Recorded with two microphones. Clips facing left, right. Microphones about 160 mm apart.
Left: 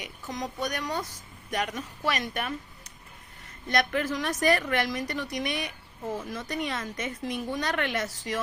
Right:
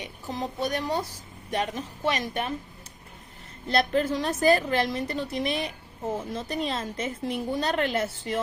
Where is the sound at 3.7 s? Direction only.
30° right (ahead or behind).